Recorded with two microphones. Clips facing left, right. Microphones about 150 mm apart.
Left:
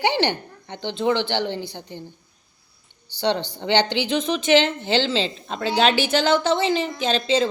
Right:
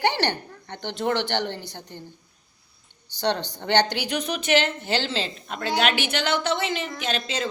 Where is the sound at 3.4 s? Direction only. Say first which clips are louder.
Left 4 dB; 15° right (ahead or behind).